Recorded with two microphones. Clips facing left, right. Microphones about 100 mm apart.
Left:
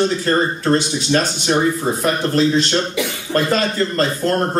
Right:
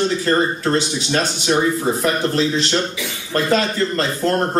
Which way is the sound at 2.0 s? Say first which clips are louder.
Left 4 dB; 50° left (ahead or behind).